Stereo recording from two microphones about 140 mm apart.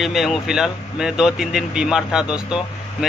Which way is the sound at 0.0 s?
Centre (ahead or behind).